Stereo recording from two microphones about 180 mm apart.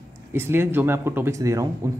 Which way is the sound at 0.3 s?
10° right (ahead or behind).